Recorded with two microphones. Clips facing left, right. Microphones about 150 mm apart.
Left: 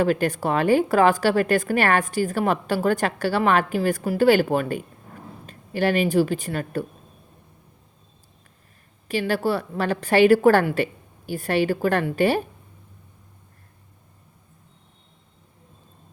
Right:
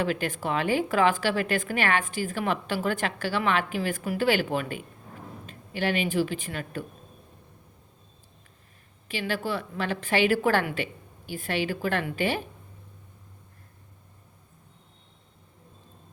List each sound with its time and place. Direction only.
0.0 s a woman's voice: 40° left (ahead or behind)
9.0 s a woman's voice: 40° left (ahead or behind)